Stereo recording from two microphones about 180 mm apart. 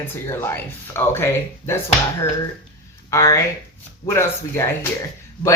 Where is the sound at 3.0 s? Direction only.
15° left (ahead or behind).